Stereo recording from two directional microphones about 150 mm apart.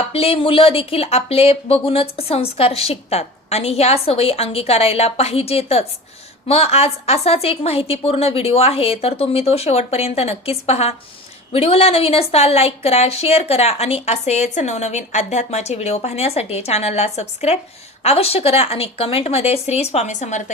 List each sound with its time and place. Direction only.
0.1 s speech: 40° left (ahead or behind)